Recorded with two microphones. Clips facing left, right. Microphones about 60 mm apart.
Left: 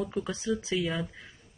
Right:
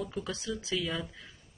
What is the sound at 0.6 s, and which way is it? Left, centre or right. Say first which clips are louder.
Speech: left 4 dB; left.